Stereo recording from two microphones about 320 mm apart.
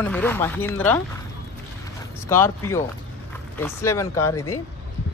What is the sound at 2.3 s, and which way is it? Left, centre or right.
Speech, centre.